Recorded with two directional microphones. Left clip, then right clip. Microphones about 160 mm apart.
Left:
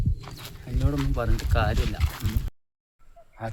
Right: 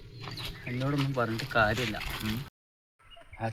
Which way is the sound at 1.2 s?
45° left (ahead or behind).